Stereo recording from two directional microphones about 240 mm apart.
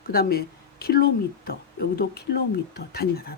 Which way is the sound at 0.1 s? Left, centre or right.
Left.